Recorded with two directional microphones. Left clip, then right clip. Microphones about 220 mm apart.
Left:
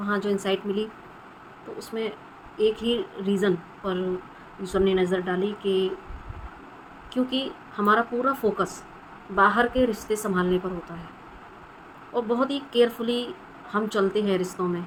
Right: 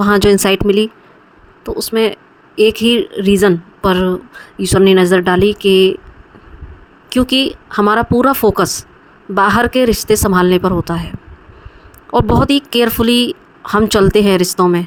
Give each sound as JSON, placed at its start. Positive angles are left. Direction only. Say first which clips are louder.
{"t": 0.0, "sound": "speech", "louder": "right 16 dB", "side_deg": -55}
{"t": 7.1, "sound": "speech", "louder": "right 14 dB", "side_deg": -55}
{"t": 12.1, "sound": "speech", "louder": "right 13 dB", "side_deg": -55}